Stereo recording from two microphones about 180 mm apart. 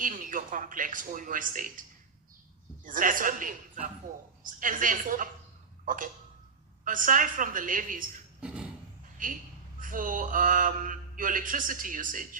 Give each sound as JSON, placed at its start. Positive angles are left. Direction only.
{"t": 0.0, "sound": "mantra", "side_deg": -50}
{"t": 2.8, "sound": "mantra", "side_deg": -50}
{"t": 5.8, "sound": "tick-tock", "side_deg": -50}
{"t": 6.8, "sound": "mantra", "side_deg": -50}
{"t": 8.4, "sound": "a sound", "side_deg": -5}
{"t": 9.1, "sound": "a woman's voice", "side_deg": -50}
{"t": 9.8, "sound": "mantra", "side_deg": -50}